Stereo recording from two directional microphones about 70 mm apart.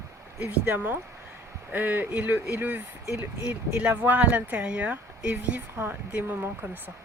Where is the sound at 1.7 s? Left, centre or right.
Right.